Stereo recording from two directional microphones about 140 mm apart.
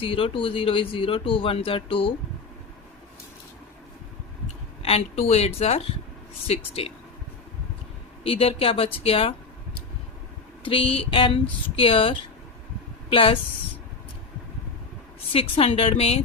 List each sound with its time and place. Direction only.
0.0 s speech: 40° left (ahead or behind)
4.8 s a woman's voice: 45° left (ahead or behind)
8.2 s a woman's voice: 40° left (ahead or behind)
10.6 s a woman's voice: 40° left (ahead or behind)
15.3 s a woman's voice: 45° left (ahead or behind)